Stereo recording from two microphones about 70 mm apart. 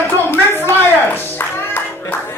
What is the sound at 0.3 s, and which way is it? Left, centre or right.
Music, left.